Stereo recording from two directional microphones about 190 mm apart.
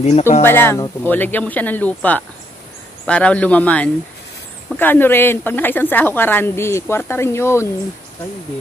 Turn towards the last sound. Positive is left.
turn(degrees=15)  # may be behind; listen again after turning